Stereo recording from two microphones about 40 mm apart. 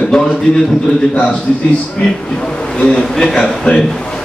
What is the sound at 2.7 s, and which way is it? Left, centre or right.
Speech, centre.